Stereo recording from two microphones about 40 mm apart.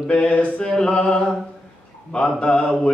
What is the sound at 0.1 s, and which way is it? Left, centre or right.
Mantra, left.